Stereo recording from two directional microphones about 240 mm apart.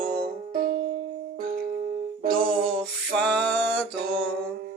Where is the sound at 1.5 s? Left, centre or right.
Right.